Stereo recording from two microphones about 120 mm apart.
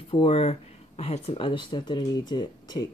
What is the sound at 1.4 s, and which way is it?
Speech, 40° left (ahead or behind).